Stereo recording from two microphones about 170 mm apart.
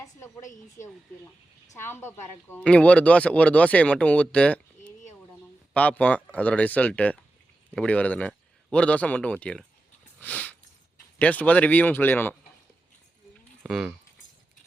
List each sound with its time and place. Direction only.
0.0 s a woman's voice: 15° left (ahead or behind)
10.2 s a sound: 10° left (ahead or behind)
11.2 s a woman's voice: 10° left (ahead or behind)
13.6 s speech: 5° right (ahead or behind)